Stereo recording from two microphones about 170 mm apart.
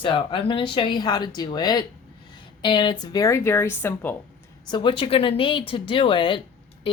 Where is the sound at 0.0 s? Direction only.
30° left (ahead or behind); by 4.1 s 15° left (ahead or behind).